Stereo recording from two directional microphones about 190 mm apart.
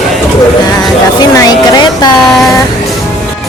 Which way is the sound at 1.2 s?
20° left (ahead or behind).